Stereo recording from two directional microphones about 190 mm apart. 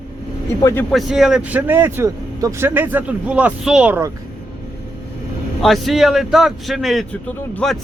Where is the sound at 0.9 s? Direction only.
Centre (ahead or behind).